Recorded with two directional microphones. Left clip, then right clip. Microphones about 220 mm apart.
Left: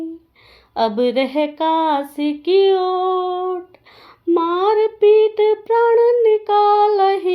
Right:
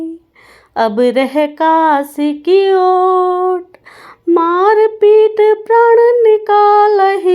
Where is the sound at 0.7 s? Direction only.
30° right (ahead or behind).